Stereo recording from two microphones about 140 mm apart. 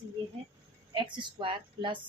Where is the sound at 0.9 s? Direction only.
35° right (ahead or behind).